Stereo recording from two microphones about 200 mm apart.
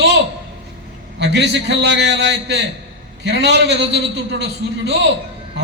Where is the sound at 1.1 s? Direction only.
60° right (ahead or behind).